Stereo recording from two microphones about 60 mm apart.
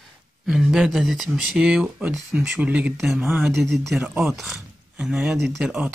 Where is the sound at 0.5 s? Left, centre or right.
Centre.